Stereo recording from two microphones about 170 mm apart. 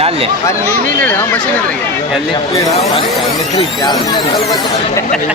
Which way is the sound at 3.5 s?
25° left (ahead or behind).